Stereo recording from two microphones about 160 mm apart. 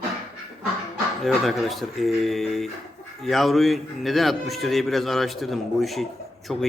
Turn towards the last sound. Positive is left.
turn(degrees=0)  # may be behind; listen again after turning